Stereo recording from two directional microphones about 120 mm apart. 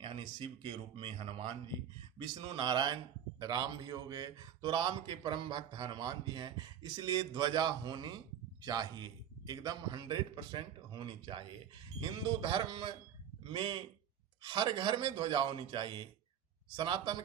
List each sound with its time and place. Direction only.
0.0 s a man's voice: 45° right (ahead or behind)